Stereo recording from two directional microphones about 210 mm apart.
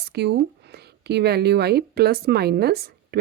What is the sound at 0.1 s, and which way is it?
Speech, 50° right (ahead or behind).